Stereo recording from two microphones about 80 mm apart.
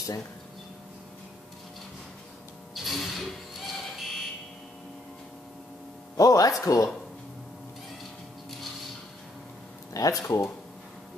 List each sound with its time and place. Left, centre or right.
2.7 s music: centre
6.1 s speech: left
9.9 s speech: left